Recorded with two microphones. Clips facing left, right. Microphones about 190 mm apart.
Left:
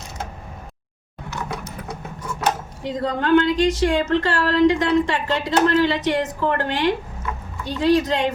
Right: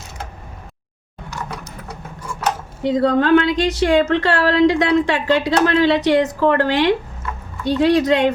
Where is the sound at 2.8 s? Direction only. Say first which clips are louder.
Right 7 dB; 70° right (ahead or behind).